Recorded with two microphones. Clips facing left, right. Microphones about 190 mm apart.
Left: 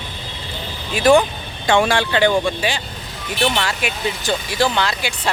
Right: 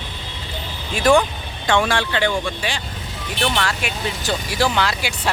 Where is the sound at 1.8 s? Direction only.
30° left (ahead or behind).